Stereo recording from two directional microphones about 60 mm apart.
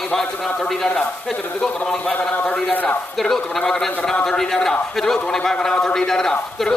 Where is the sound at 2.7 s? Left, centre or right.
Left.